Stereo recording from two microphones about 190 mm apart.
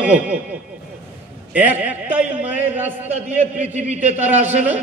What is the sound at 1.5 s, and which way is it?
A man's voice, 10° right (ahead or behind).